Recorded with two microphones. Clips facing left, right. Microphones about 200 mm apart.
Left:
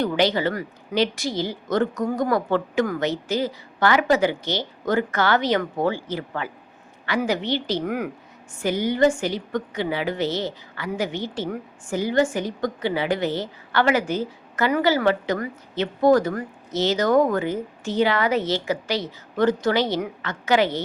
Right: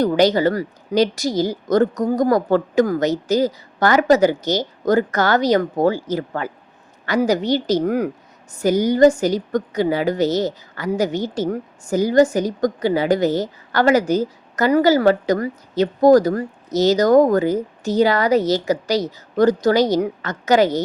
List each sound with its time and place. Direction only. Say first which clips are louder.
0.0 s a woman's voice: right 6 dB; 40° right (ahead or behind)